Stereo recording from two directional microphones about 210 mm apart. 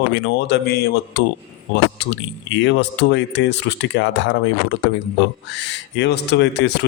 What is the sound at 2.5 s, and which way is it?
A man's voice, 60° left (ahead or behind).